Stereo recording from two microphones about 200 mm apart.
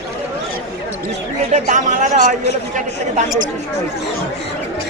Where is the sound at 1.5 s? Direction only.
35° right (ahead or behind).